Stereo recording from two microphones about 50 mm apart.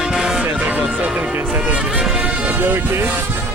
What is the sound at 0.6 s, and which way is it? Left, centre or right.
Speech, right.